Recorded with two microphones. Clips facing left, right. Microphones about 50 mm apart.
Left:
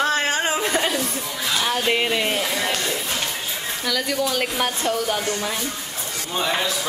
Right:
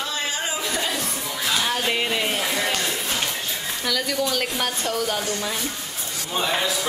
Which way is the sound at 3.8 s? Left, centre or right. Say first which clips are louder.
Left 1 dB; centre.